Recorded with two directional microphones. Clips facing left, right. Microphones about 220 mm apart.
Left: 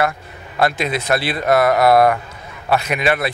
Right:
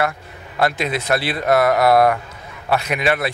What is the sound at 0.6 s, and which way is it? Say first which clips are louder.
A man's voice: left 1 dB; 20° left (ahead or behind).